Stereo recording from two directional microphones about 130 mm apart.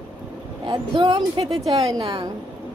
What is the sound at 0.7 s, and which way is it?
Speech, 35° right (ahead or behind).